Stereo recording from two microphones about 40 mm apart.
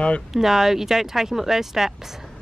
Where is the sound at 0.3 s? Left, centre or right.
Centre.